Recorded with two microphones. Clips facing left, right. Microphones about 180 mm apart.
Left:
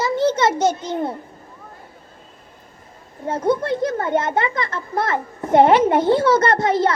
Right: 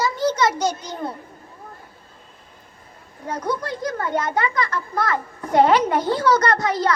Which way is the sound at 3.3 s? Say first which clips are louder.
Left 6 dB; 25° left (ahead or behind).